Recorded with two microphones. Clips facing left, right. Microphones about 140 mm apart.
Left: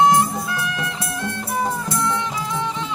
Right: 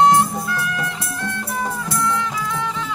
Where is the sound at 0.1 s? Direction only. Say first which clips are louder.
Right 1 dB; 15° left (ahead or behind).